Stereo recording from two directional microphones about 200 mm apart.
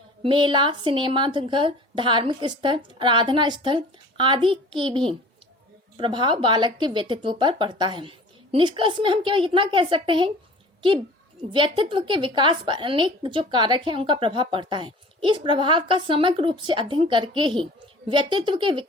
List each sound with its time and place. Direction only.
0.2 s a woman's voice: 25° right (ahead or behind)
11.5 s a woman's voice: 25° right (ahead or behind)